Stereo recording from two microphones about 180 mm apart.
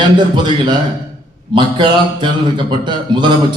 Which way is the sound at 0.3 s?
25° right (ahead or behind).